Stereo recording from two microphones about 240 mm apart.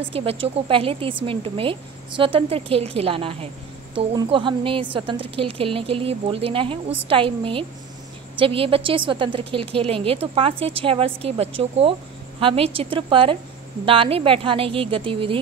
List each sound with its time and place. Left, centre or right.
0.1 s a woman's voice: right